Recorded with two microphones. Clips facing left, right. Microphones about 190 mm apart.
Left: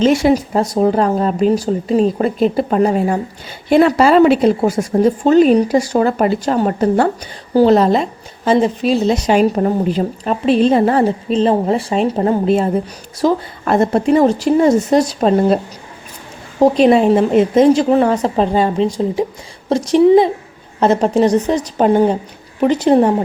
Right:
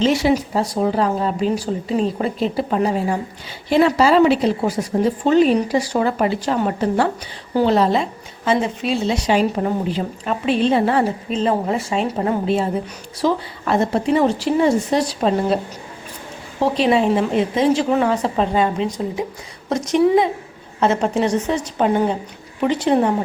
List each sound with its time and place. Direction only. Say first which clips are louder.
0.0 s speech: left 4 dB; 50° left (ahead or behind)
13.2 s speech: left 4 dB; 50° left (ahead or behind)
16.6 s speech: left 6 dB; 45° left (ahead or behind)